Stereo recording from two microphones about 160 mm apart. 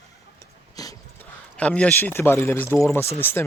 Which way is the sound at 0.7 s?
25° left (ahead or behind).